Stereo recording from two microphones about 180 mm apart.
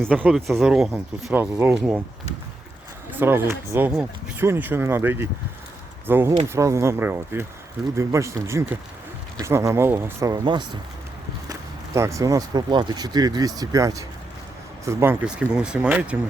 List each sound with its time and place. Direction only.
0.0 s speech: 10° right (ahead or behind)
3.1 s speech: 10° right (ahead or behind)
11.9 s speech: 15° right (ahead or behind)